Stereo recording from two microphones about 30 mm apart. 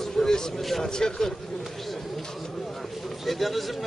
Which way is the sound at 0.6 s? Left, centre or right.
Centre.